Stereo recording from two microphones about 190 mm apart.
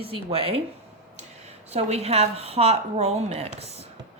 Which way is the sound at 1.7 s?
35° right (ahead or behind).